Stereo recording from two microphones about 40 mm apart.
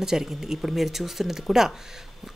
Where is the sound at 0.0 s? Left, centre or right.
Centre.